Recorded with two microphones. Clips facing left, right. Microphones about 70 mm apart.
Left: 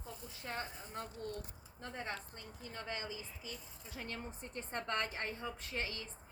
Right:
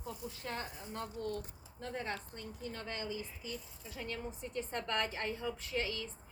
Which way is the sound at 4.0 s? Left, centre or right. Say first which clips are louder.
Right 4 dB; left.